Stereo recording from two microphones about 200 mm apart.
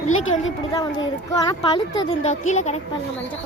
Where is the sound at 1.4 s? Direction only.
20° left (ahead or behind).